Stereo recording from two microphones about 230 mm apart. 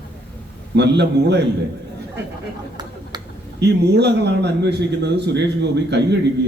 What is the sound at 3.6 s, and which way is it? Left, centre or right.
Speech, right.